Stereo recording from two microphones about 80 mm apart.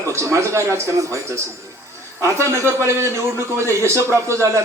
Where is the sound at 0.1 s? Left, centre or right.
Right.